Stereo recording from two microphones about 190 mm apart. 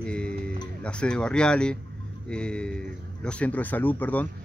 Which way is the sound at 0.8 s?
5° left (ahead or behind).